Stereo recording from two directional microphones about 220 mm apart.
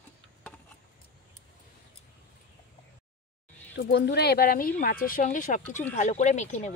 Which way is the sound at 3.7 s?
50° left (ahead or behind).